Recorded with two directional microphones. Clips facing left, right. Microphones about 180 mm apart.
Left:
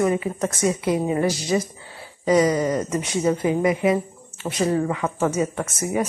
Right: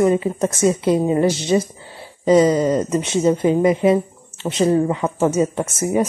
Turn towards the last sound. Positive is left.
turn(degrees=-25)  # may be behind; listen again after turning